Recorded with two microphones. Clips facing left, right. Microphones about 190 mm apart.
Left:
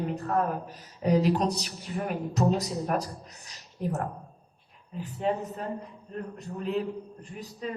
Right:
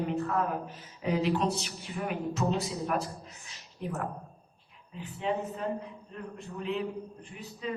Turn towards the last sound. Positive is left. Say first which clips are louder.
# left 4 dB
turn(degrees=40)  # may be behind; listen again after turning